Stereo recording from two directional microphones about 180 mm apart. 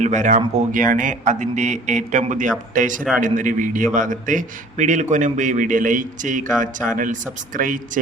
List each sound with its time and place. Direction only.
0.0 s a man's voice: 45° right (ahead or behind)